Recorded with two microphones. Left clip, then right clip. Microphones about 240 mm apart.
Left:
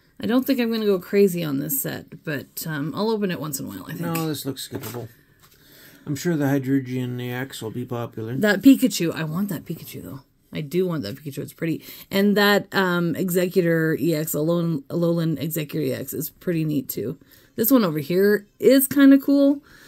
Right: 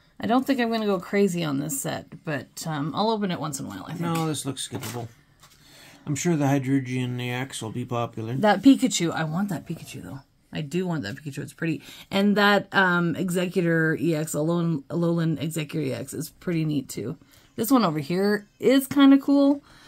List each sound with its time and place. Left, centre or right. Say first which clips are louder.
0.2 s speech: left 1 dB; centre
4.0 s speech: left 1 dB; centre
6.0 s speech: left 1 dB; centre
8.4 s speech: left 2 dB; centre